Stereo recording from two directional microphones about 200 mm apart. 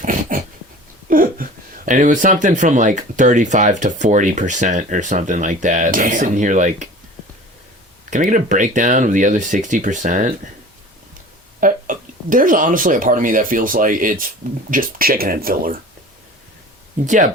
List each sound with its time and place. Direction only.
0.0 s dog: 40° right (ahead or behind)
1.1 s speech: 45° right (ahead or behind)
8.1 s speech: 40° right (ahead or behind)
11.6 s speech: 40° right (ahead or behind)
17.1 s speech: 40° right (ahead or behind)